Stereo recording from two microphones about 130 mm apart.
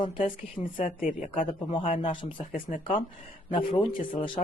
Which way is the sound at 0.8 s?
85° left.